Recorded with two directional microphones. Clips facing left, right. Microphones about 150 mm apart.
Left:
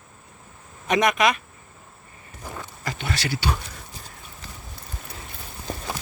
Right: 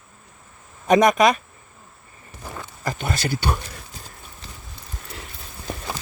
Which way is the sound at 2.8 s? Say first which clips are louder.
Right 4 dB; 45° right (ahead or behind).